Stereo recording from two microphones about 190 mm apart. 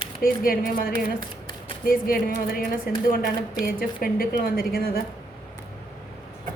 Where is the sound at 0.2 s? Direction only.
50° left (ahead or behind).